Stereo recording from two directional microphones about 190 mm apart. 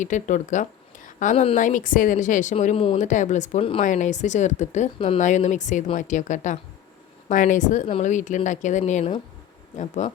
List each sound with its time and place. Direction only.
0.0 s speech: 40° left (ahead or behind)